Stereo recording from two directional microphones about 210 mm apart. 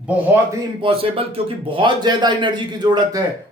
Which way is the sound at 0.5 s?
25° right (ahead or behind).